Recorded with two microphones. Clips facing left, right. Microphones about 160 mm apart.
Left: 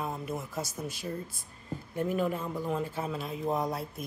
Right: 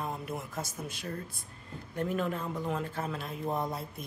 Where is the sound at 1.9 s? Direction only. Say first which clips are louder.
Left 2 dB; 5° left (ahead or behind).